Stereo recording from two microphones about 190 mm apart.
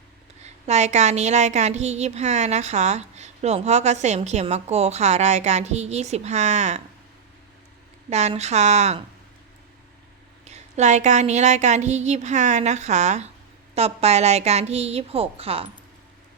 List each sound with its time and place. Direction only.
0.4 s a woman's voice: 35° right (ahead or behind)
8.1 s a woman's voice: 35° right (ahead or behind)
10.4 s a woman's voice: 35° right (ahead or behind)